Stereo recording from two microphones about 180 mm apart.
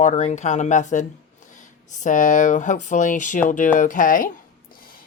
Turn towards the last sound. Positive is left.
turn(degrees=50)  # may be behind; listen again after turning